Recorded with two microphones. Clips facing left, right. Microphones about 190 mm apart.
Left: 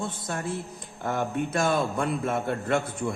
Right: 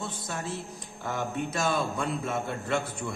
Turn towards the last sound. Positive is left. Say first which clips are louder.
# left 4 dB
turn(degrees=50)  # may be behind; listen again after turning